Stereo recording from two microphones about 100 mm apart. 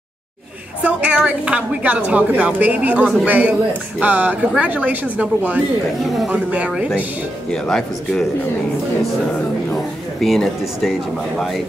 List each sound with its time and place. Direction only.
0.8 s a woman's voice: 10° right (ahead or behind)
6.0 s speech: centre (ahead or behind)
6.3 s a woman's voice: 10° right (ahead or behind)
7.5 s speech: 5° left (ahead or behind)
10.2 s speech: centre (ahead or behind)